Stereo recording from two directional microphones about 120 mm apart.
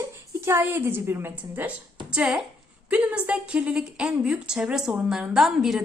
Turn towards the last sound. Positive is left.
turn(degrees=-5)  # may be behind; listen again after turning